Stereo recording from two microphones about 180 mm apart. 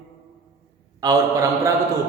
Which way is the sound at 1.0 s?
20° right (ahead or behind).